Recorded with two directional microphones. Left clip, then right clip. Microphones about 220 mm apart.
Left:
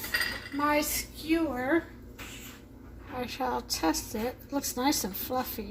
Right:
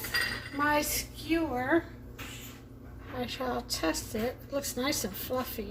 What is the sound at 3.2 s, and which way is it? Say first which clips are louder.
A woman's voice: left 2 dB; 35° left (ahead or behind).